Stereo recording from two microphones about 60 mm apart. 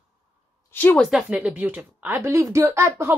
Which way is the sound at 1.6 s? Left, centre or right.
Right.